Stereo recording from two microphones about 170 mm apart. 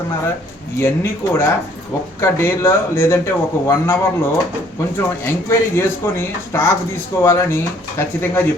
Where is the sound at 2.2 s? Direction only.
15° left (ahead or behind).